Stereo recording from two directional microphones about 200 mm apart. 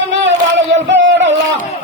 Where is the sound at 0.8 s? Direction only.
65° right (ahead or behind).